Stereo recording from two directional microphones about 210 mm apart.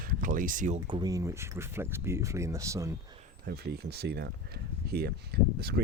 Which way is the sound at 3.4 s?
50° right (ahead or behind).